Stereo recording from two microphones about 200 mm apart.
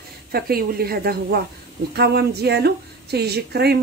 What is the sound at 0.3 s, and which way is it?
Speech, 50° right (ahead or behind).